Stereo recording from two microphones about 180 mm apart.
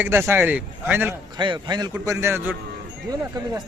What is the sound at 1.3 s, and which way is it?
A man's voice, 25° right (ahead or behind).